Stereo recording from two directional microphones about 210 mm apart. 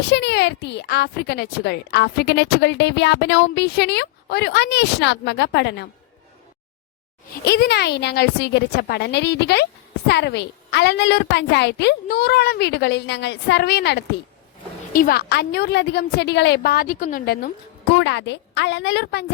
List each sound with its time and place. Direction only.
0.1 s speech: 55° left (ahead or behind)
7.4 s speech: 50° left (ahead or behind)
17.9 s a woman's voice: 60° left (ahead or behind)